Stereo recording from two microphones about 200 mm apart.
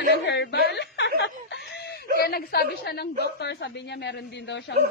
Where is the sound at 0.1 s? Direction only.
60° left (ahead or behind).